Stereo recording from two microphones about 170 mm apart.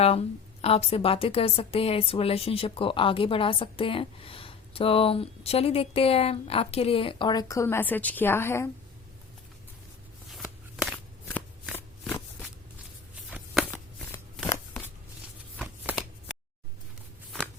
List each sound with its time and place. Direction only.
0.0 s a woman's voice: 35° left (ahead or behind); by 8.7 s 15° left (ahead or behind)
10.2 s shuffling cards: centre (ahead or behind)
15.5 s shuffling cards: 10° right (ahead or behind)